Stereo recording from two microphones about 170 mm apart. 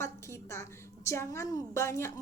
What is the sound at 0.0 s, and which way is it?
A woman's voice, 15° left (ahead or behind).